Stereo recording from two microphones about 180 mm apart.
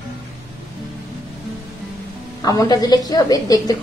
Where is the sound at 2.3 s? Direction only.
20° left (ahead or behind).